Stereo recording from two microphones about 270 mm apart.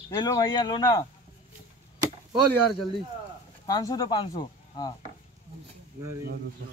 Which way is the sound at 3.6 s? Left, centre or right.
Centre.